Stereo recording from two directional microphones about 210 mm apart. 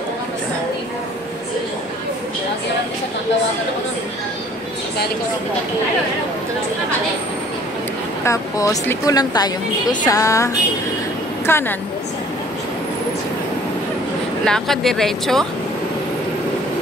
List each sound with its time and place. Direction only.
8.3 s speech: 15° left (ahead or behind)
14.4 s speech: centre (ahead or behind)